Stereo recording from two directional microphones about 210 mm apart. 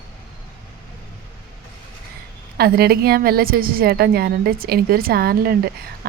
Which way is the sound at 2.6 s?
50° right (ahead or behind).